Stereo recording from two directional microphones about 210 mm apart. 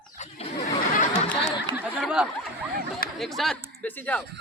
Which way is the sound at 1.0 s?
35° left (ahead or behind).